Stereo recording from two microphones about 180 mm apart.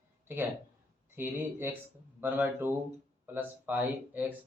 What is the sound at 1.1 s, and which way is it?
Speech, 10° right (ahead or behind).